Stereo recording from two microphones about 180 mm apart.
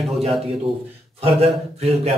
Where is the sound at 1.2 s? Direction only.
35° right (ahead or behind).